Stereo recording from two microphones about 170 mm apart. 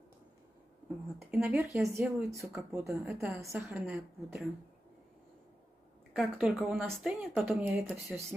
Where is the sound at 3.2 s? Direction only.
15° right (ahead or behind).